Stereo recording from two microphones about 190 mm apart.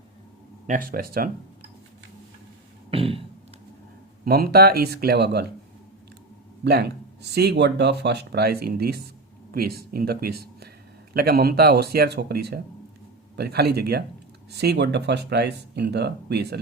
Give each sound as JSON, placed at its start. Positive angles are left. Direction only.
{"t": 0.7, "sound": "speech", "side_deg": -50}
{"t": 2.9, "sound": "a sound", "side_deg": -30}
{"t": 4.3, "sound": "speech", "side_deg": -55}
{"t": 6.7, "sound": "speech", "side_deg": -60}